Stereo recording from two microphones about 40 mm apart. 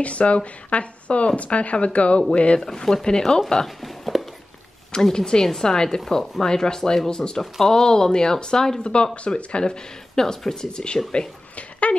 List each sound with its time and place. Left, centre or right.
0.0 s speech: left
2.6 s speech: centre
3.6 s a sound: centre
5.1 s speech: centre